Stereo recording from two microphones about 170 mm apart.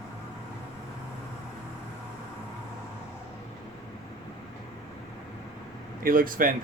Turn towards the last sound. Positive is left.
turn(degrees=-55)  # may be behind; listen again after turning